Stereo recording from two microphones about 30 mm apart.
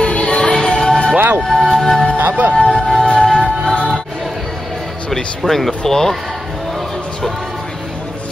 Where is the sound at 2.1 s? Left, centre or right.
Right.